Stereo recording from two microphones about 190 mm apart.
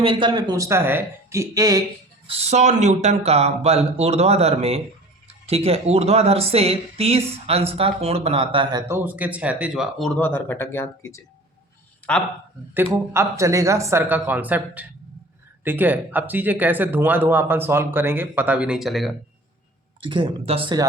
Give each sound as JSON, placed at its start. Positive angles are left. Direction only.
{"t": 0.0, "sound": "speech", "side_deg": -25}
{"t": 2.2, "sound": "speech", "side_deg": -35}
{"t": 8.9, "sound": "speech", "side_deg": -10}
{"t": 12.7, "sound": "speech", "side_deg": -10}
{"t": 20.0, "sound": "speech", "side_deg": -25}